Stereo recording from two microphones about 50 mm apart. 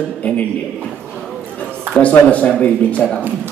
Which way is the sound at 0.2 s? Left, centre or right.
Left.